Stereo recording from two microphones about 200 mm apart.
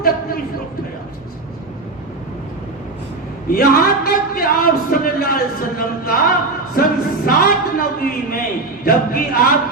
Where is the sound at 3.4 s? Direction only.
45° left (ahead or behind).